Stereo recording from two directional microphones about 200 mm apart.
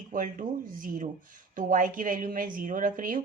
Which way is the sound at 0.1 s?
40° right (ahead or behind).